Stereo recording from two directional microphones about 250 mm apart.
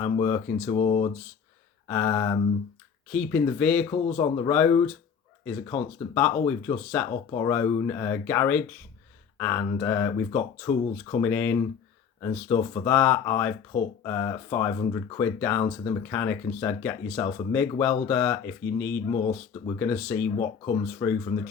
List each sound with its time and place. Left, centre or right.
0.0 s speech: centre